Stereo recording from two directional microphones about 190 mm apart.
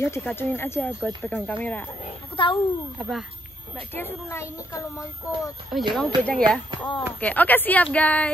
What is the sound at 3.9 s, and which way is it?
Speech, 10° left (ahead or behind).